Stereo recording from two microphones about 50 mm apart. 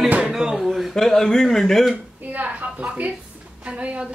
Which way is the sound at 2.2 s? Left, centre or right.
Right.